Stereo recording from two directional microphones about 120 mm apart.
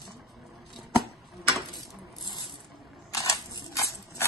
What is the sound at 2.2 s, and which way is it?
Coin, 40° left (ahead or behind).